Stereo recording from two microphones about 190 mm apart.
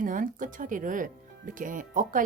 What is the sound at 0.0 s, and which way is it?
Speech, 45° right (ahead or behind).